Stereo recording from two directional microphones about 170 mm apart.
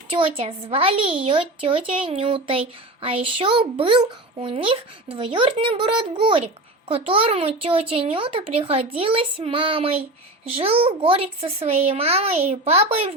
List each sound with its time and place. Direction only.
0.1 s a woman's voice: 35° right (ahead or behind)